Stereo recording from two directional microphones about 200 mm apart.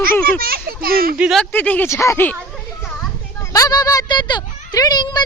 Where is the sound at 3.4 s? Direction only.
15° left (ahead or behind).